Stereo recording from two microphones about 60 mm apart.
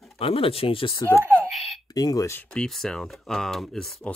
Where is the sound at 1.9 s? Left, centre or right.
Left.